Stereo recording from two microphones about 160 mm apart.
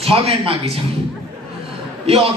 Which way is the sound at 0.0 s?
40° right (ahead or behind).